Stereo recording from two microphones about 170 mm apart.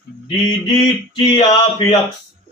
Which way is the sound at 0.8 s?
30° left (ahead or behind).